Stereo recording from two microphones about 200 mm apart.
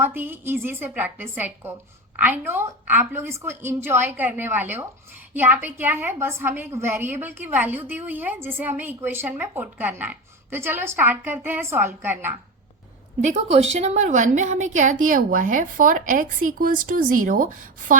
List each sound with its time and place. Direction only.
0.0 s a woman's voice: 10° right (ahead or behind)
13.2 s a woman's voice: 35° right (ahead or behind)